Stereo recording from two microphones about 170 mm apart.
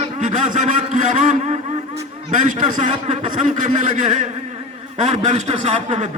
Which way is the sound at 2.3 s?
50° right (ahead or behind).